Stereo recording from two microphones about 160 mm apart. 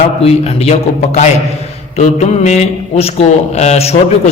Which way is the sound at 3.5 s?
45° left (ahead or behind).